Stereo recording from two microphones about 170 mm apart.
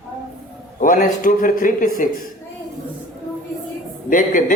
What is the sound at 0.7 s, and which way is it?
Speech, 55° left (ahead or behind).